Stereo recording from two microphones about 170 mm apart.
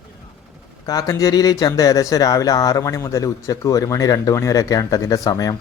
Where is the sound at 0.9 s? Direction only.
20° left (ahead or behind).